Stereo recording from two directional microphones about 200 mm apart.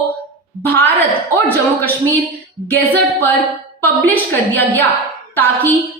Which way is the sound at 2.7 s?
10° left (ahead or behind).